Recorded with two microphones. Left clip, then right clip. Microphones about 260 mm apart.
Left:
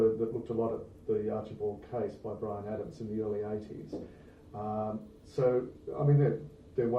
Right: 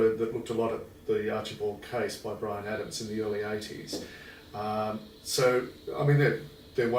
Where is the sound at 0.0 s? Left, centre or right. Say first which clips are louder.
Right 2 dB; centre.